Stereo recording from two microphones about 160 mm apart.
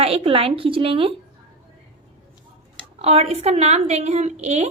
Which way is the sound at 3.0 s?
40° right (ahead or behind).